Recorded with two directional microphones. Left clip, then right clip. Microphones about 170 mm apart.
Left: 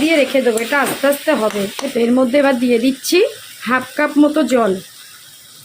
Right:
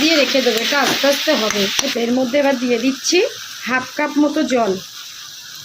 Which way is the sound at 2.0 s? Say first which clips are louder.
Left 6 dB; 25° left (ahead or behind).